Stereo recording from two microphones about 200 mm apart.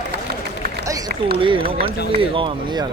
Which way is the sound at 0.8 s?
15° right (ahead or behind).